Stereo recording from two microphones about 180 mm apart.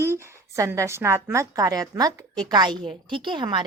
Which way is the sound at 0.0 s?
15° right (ahead or behind).